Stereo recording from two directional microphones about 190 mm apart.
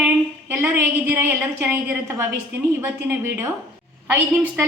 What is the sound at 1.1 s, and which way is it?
A woman's voice, 10° right (ahead or behind).